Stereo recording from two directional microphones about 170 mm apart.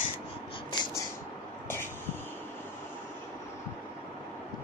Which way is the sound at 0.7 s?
25° left (ahead or behind).